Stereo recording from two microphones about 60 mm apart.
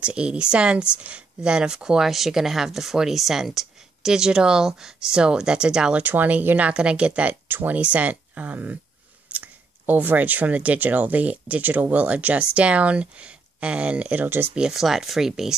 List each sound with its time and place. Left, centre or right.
0.0 s speech: centre
6.0 s speech: right
7.4 s speech: right
14.5 s speech: centre